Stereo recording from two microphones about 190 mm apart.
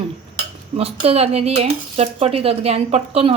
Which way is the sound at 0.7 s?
30° right (ahead or behind).